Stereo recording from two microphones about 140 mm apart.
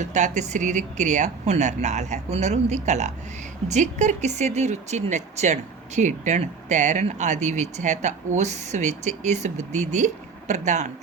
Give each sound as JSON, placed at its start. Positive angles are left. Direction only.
{"t": 0.0, "sound": "speech", "side_deg": -55}